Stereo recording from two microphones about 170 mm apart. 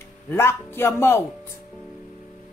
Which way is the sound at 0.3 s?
15° left (ahead or behind).